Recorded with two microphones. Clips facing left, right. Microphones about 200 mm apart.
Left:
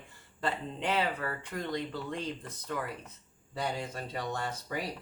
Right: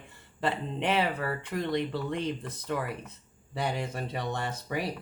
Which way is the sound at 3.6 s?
25° right (ahead or behind).